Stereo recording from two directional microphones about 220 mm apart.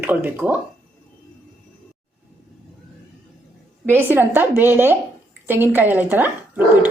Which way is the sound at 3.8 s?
10° right (ahead or behind).